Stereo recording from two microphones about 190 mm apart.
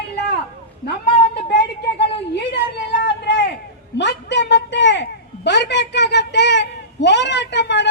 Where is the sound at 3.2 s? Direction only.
60° left (ahead or behind).